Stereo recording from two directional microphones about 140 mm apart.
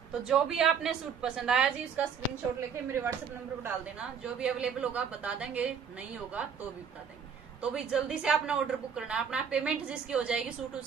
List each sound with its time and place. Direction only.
0.2 s a woman's voice: 5° right (ahead or behind)
2.7 s speech: 20° right (ahead or behind)
4.2 s a woman's voice: 5° right (ahead or behind)
7.6 s a woman's voice: 5° right (ahead or behind)